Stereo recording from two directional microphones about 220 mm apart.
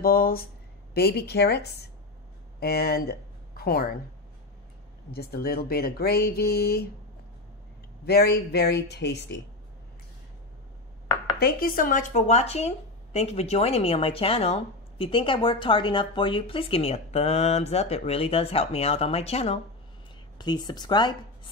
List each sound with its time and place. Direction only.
0.0 s speech: 40° left (ahead or behind)
5.1 s speech: 45° left (ahead or behind)
8.0 s speech: 45° left (ahead or behind)
11.3 s speech: 45° left (ahead or behind); by 21.1 s 20° left (ahead or behind)